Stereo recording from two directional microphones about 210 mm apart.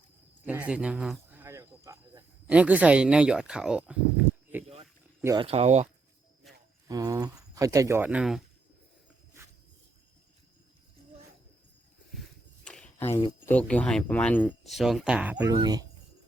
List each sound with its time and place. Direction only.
0.4 s a sound: 5° right (ahead or behind)
5.2 s speech: 15° right (ahead or behind)
5.5 s speech: 30° right (ahead or behind)
6.8 s speech: 15° right (ahead or behind)
12.6 s a sound: 5° left (ahead or behind)
13.4 s speech: 5° left (ahead or behind); by 15.9 s 20° right (ahead or behind)